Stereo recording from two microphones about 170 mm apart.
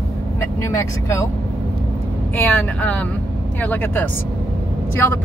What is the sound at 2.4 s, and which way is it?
Speech, 10° left (ahead or behind).